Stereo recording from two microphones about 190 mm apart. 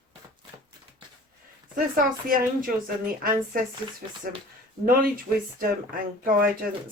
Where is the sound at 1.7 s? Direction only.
45° right (ahead or behind).